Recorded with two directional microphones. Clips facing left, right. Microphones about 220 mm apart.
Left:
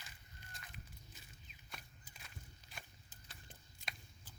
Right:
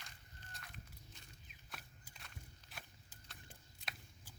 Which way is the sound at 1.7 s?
Centre (ahead or behind).